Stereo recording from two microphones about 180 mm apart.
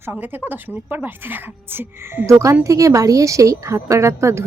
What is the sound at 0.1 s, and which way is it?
Speech, 10° right (ahead or behind).